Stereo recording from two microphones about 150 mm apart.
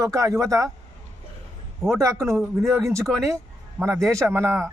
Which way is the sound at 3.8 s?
20° right (ahead or behind).